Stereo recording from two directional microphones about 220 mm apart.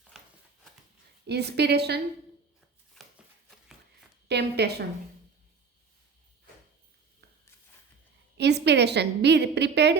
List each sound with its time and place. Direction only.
1.3 s a woman's voice: 50° right (ahead or behind)
4.3 s a woman's voice: 50° right (ahead or behind)
8.4 s a woman's voice: 50° right (ahead or behind)